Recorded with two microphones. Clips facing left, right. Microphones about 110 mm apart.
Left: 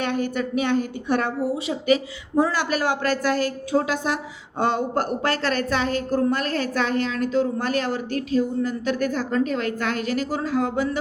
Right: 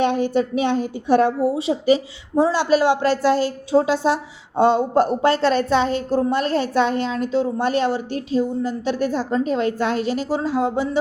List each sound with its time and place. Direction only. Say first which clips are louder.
0.0 s a woman's voice: right 6 dB; 25° right (ahead or behind)